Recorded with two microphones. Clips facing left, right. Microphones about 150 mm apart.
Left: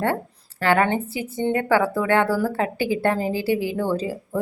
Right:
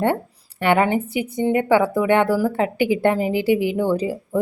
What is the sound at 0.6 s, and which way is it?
A woman's voice, 20° right (ahead or behind).